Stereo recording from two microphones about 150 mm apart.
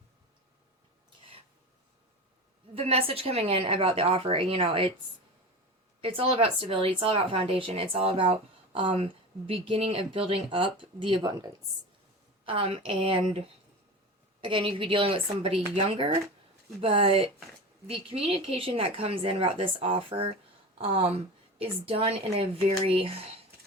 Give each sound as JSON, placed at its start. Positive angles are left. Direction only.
{"t": 2.7, "sound": "speech", "side_deg": -40}
{"t": 6.0, "sound": "speech", "side_deg": -40}
{"t": 12.5, "sound": "speech", "side_deg": -35}
{"t": 14.4, "sound": "speech", "side_deg": -35}
{"t": 21.6, "sound": "speech", "side_deg": -40}